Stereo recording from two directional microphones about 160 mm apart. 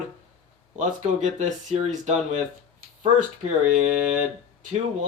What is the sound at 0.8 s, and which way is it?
Speech, 50° right (ahead or behind).